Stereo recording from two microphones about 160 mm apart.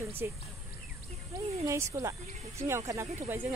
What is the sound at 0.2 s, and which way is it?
Speech, 15° right (ahead or behind).